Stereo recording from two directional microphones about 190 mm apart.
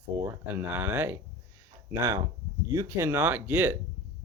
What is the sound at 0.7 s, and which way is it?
Speech, 10° right (ahead or behind).